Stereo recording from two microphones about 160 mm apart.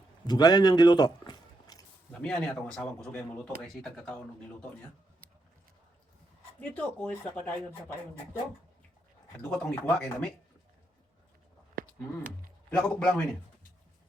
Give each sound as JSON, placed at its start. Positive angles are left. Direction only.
{"t": 0.3, "sound": "speech", "side_deg": 25}
{"t": 2.2, "sound": "speech", "side_deg": 5}
{"t": 6.6, "sound": "speech", "side_deg": 10}
{"t": 9.4, "sound": "speech", "side_deg": 10}
{"t": 12.7, "sound": "speech", "side_deg": 5}